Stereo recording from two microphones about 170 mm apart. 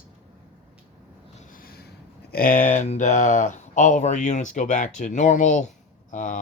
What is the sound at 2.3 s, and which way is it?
Speech, 55° left (ahead or behind).